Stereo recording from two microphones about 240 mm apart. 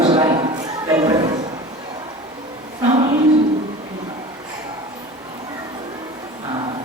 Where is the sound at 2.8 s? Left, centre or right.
Right.